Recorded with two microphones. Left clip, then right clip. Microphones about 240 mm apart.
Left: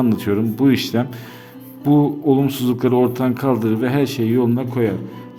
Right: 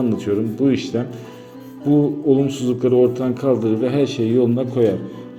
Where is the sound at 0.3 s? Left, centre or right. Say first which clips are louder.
Even; left.